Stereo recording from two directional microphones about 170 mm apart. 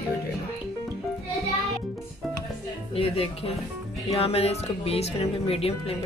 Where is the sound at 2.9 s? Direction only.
35° left (ahead or behind).